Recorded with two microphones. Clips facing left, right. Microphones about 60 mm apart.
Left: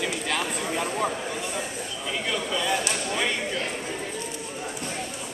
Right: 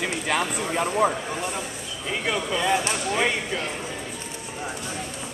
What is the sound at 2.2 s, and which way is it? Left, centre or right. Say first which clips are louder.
Speech: right 4 dB; right.